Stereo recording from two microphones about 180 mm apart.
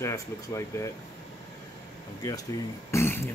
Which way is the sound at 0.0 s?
15° left (ahead or behind).